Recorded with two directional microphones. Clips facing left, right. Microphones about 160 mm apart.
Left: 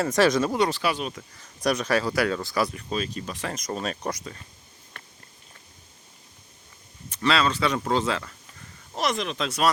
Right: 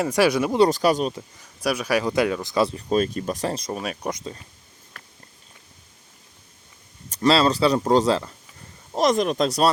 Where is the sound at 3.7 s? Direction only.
10° right (ahead or behind).